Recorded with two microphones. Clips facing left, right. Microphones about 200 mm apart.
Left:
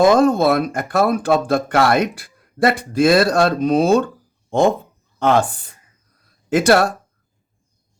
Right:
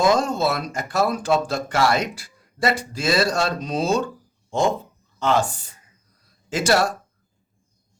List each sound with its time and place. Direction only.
0.0 s speech: 55° left (ahead or behind)